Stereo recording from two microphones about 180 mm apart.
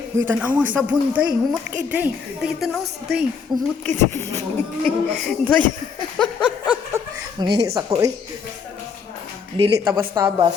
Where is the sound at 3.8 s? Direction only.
15° left (ahead or behind).